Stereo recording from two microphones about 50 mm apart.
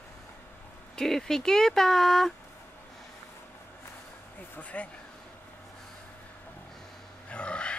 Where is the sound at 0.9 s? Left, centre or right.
Centre.